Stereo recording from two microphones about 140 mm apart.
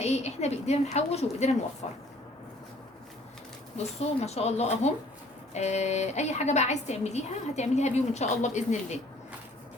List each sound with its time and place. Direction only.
0.0 s a woman's voice: 50° left (ahead or behind)
4.0 s a woman's voice: 50° left (ahead or behind)